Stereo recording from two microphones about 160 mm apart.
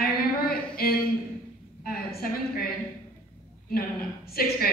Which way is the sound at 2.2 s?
70° left (ahead or behind).